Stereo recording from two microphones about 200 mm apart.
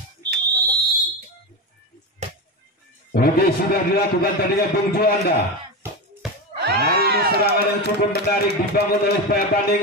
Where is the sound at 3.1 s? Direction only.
50° left (ahead or behind).